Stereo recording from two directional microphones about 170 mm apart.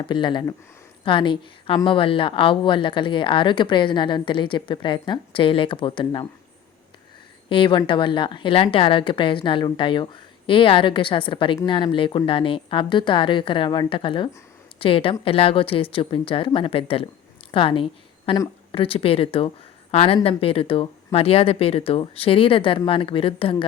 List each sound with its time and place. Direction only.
0.0 s a woman's voice: 30° left (ahead or behind)
7.5 s a woman's voice: 30° left (ahead or behind)